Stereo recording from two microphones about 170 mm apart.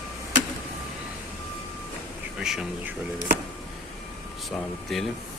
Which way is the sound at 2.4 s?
5° right (ahead or behind).